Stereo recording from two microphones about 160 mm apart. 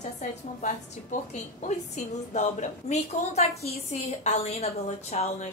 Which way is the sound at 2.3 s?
45° left (ahead or behind).